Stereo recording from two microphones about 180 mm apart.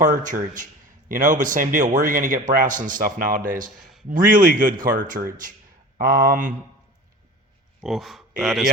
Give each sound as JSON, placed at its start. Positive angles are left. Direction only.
{"t": 0.0, "sound": "a man's voice", "side_deg": -45}
{"t": 7.8, "sound": "a man's voice", "side_deg": 0}